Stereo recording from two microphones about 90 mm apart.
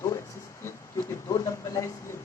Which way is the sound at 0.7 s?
35° left (ahead or behind).